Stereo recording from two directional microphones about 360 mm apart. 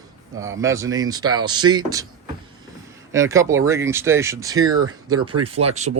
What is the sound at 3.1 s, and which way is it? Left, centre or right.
Speech, centre.